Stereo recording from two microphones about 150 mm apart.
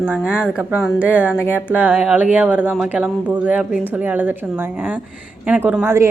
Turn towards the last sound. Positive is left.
turn(degrees=-15)  # may be behind; listen again after turning